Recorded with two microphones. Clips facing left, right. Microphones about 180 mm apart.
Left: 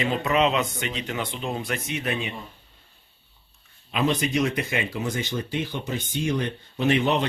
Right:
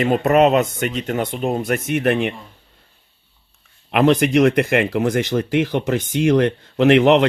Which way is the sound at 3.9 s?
70° right (ahead or behind).